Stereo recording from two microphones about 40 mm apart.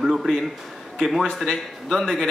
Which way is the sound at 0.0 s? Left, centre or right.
Centre.